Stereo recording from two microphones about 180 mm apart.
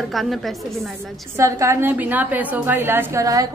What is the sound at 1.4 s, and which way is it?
A woman's voice, 15° right (ahead or behind).